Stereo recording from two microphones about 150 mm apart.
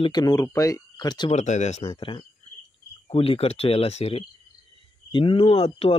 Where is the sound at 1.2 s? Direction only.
50° left (ahead or behind).